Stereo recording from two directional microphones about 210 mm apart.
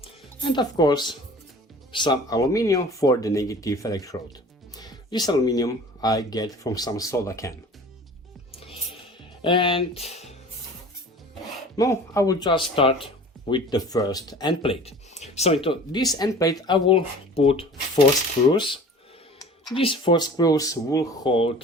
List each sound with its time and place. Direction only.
0.0 s music: 20° left (ahead or behind)
1.9 s speech: 20° left (ahead or behind)
8.5 s music: 25° left (ahead or behind)
9.4 s speech: 20° left (ahead or behind)
11.8 s speech: 15° left (ahead or behind)